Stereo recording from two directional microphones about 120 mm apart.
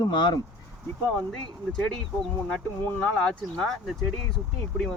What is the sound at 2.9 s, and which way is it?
Speech, 10° left (ahead or behind).